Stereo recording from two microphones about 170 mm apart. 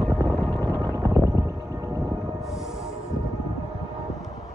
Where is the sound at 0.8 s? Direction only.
20° right (ahead or behind).